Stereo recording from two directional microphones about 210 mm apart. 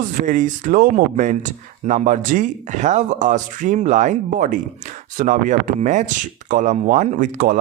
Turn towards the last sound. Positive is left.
turn(degrees=-40)  # may be behind; listen again after turning